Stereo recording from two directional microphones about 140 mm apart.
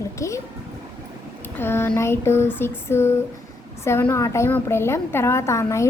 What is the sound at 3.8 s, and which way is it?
A woman's voice, 20° left (ahead or behind).